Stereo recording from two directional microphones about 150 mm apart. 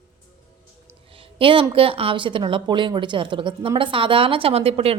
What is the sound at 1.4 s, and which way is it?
A woman's voice, 35° right (ahead or behind).